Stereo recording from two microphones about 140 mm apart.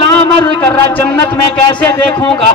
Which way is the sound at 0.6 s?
15° left (ahead or behind).